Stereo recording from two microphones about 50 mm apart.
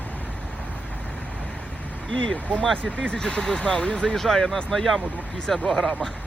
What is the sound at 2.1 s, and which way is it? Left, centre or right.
Speech, left.